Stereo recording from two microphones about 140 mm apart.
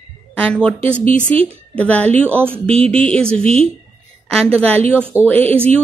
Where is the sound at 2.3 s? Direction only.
15° right (ahead or behind).